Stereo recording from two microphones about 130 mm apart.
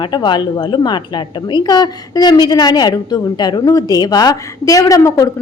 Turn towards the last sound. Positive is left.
turn(degrees=25)  # may be behind; listen again after turning